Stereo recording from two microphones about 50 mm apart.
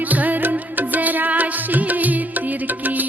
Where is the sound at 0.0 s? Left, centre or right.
Right.